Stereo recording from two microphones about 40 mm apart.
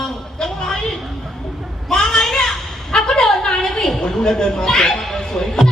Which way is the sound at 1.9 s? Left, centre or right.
Centre.